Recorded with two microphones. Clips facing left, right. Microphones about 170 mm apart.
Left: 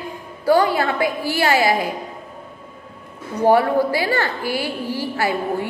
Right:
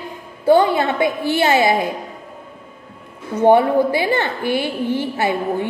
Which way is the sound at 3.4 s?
20° right (ahead or behind).